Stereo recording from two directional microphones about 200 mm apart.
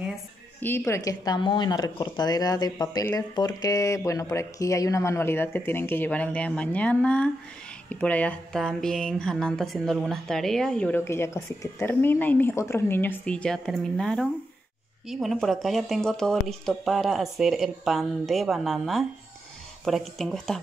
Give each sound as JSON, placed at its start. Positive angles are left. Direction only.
{"t": 0.6, "sound": "a woman's voice", "side_deg": 10}